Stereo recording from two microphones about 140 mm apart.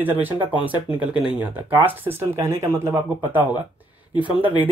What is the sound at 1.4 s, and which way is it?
Speech, 15° right (ahead or behind).